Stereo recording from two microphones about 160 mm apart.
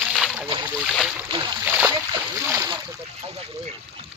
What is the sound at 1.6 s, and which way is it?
Splash, 10° right (ahead or behind).